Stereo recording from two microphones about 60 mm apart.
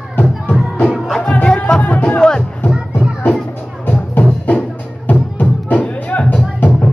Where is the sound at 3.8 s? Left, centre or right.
Left.